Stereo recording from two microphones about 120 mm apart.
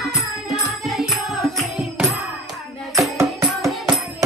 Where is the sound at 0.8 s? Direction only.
Centre (ahead or behind).